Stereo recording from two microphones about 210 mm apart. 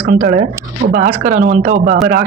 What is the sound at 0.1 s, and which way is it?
Speech, 45° right (ahead or behind).